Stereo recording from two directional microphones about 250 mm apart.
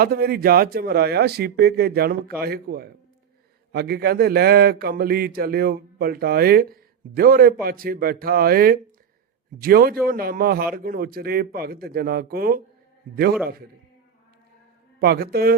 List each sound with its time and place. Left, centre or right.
0.0 s speech: right
15.0 s speech: right